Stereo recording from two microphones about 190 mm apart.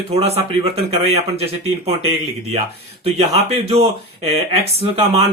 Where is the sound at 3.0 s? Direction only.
30° right (ahead or behind).